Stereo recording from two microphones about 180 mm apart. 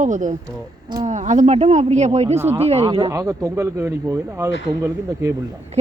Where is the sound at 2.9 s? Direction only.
25° right (ahead or behind).